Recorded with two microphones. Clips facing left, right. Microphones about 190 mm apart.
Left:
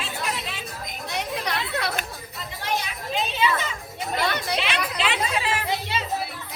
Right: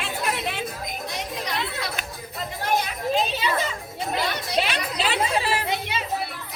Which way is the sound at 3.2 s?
35° right (ahead or behind).